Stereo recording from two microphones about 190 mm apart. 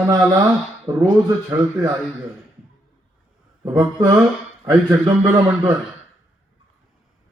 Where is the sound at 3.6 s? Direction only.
20° right (ahead or behind).